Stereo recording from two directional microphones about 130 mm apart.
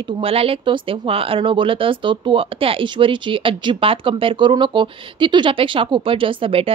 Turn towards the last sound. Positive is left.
turn(degrees=-45)  # may be behind; listen again after turning